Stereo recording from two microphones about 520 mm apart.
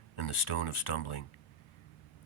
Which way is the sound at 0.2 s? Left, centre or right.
Left.